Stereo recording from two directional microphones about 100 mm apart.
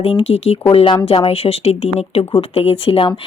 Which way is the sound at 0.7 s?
60° left (ahead or behind).